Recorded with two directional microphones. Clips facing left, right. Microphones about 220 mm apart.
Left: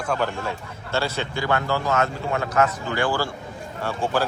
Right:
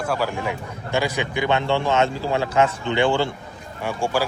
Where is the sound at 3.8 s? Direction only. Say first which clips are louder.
Right 1 dB; 10° right (ahead or behind).